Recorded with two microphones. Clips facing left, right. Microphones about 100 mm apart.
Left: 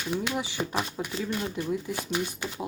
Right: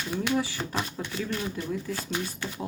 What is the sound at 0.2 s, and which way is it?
Speech, 15° left (ahead or behind).